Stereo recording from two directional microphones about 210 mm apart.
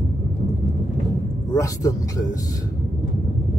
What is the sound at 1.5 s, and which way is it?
Speech, 15° left (ahead or behind).